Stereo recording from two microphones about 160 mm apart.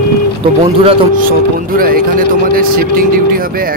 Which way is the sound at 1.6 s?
65° right (ahead or behind).